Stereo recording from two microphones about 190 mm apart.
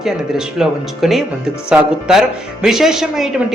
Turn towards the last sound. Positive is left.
turn(degrees=0)  # may be behind; listen again after turning